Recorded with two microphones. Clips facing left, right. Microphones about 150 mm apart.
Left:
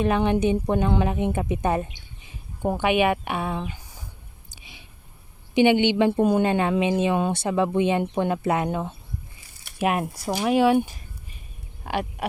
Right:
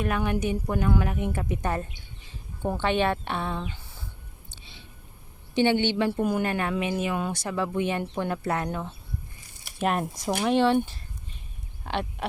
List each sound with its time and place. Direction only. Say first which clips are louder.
0.0 s a woman's voice: left 6 dB; 20° left (ahead or behind)
4.5 s a sound: left 2 dB; 15° left (ahead or behind)
5.5 s speech: left 5 dB; 15° left (ahead or behind)
9.7 s a woman's voice: left 2 dB; 10° left (ahead or behind)